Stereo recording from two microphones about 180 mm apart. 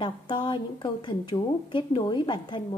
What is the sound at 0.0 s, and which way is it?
A woman's voice, 25° left (ahead or behind).